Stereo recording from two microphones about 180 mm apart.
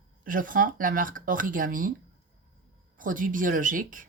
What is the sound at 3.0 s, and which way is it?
Speech, 50° right (ahead or behind).